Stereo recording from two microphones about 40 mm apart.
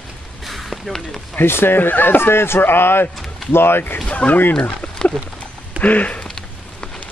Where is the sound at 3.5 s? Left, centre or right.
Left.